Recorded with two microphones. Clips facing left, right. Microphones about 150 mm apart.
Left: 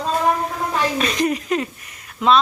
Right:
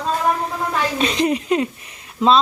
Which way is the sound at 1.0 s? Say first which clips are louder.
Right 2 dB; 30° right (ahead or behind).